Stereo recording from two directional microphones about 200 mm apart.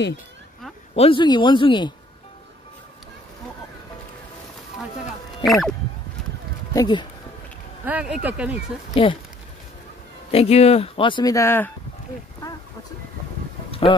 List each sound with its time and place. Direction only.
0.9 s speech: 25° left (ahead or behind)
5.4 s speech: centre (ahead or behind)
6.7 s speech: 20° left (ahead or behind)
7.8 s speech: 5° right (ahead or behind)
10.3 s speech: 30° left (ahead or behind); by 11.7 s 10° left (ahead or behind)
13.7 s vehicle: 25° left (ahead or behind)